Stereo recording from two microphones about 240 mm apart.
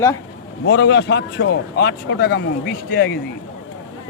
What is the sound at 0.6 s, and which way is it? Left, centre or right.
A man's voice, left.